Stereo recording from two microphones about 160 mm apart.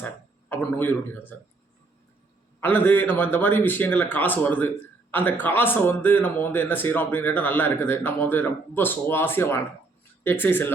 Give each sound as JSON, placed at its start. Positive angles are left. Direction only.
{"t": 0.0, "sound": "speech", "side_deg": 10}
{"t": 2.6, "sound": "a man's voice", "side_deg": 10}